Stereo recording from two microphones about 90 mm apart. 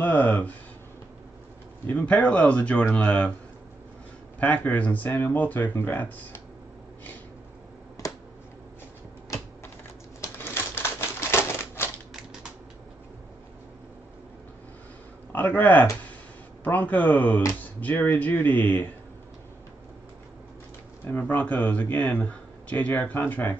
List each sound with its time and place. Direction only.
0.0 s speech: 20° left (ahead or behind)
1.9 s speech: 15° left (ahead or behind)
4.4 s speech: 15° left (ahead or behind)
10.2 s typewriter: 25° left (ahead or behind)
15.3 s speech: 20° left (ahead or behind)
21.0 s speech: 20° left (ahead or behind)